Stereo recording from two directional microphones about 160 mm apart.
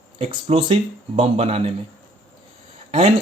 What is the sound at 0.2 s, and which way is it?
Speech, 35° right (ahead or behind).